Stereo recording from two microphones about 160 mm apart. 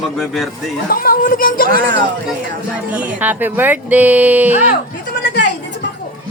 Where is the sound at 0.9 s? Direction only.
65° left (ahead or behind).